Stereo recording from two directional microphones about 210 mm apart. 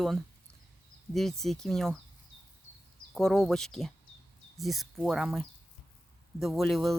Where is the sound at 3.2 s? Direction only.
Centre (ahead or behind).